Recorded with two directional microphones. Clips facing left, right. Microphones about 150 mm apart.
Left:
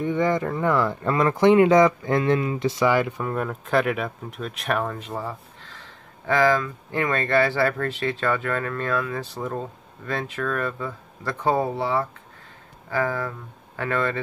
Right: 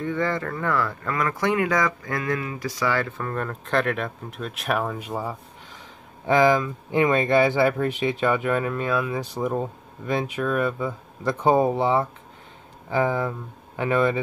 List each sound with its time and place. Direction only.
0.0 s speech: 15° left (ahead or behind); by 14.2 s 15° right (ahead or behind)